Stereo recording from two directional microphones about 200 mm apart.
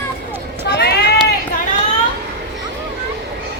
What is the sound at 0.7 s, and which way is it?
Sheep, 55° left (ahead or behind).